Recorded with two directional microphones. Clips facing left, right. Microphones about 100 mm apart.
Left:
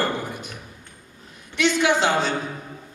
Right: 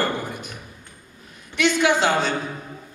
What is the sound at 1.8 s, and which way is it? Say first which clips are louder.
Speech: right 1 dB; 20° left (ahead or behind).